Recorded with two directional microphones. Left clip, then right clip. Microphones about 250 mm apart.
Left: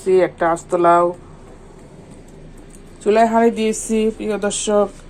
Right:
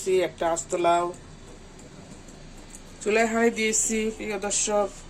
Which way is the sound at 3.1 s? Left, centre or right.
Centre.